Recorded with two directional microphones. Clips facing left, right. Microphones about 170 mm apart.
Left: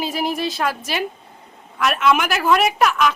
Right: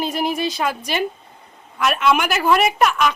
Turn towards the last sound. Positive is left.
turn(degrees=0)  # may be behind; listen again after turning